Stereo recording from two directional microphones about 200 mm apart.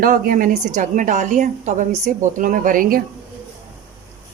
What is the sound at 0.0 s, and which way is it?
A woman's voice, 45° right (ahead or behind).